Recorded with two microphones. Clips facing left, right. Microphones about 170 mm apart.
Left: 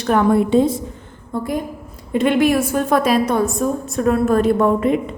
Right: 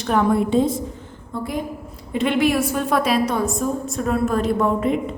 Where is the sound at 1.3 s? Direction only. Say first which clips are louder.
Left 3 dB; 50° left (ahead or behind).